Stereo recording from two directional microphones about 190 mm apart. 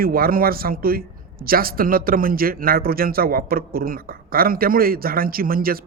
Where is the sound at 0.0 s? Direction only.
50° right (ahead or behind).